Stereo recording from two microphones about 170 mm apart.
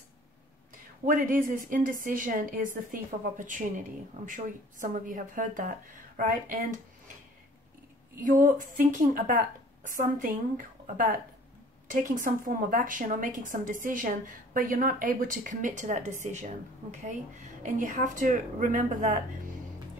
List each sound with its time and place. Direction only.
1.0 s a woman's voice: 55° right (ahead or behind)
8.2 s a woman's voice: 50° right (ahead or behind)
11.9 s a woman's voice: 50° right (ahead or behind)